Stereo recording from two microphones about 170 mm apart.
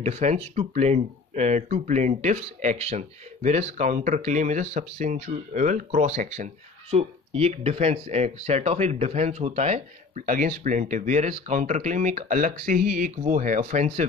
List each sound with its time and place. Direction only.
0.0 s speech: 40° right (ahead or behind)